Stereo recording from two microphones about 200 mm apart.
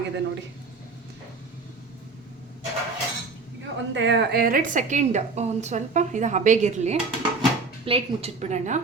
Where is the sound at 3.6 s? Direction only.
60° right (ahead or behind).